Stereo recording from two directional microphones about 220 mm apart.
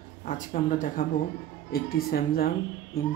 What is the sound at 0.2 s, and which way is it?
A woman's voice, 40° left (ahead or behind).